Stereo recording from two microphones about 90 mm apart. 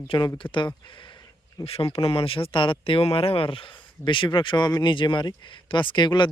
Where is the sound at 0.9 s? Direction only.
65° left (ahead or behind).